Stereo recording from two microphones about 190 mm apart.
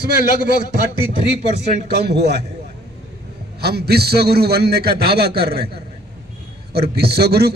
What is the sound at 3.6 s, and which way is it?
A man's voice, 55° right (ahead or behind).